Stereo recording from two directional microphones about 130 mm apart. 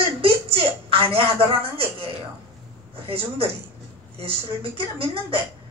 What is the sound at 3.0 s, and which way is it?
Speech, 45° right (ahead or behind).